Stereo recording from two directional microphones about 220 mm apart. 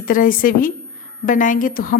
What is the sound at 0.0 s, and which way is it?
A woman's voice, 40° left (ahead or behind).